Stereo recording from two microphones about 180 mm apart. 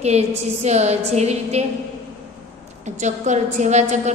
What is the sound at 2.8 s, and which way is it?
A woman's voice, 40° right (ahead or behind).